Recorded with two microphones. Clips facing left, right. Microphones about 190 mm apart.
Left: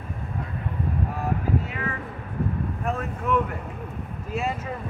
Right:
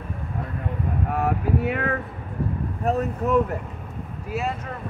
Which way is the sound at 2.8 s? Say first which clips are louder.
Right 9 dB; 40° right (ahead or behind).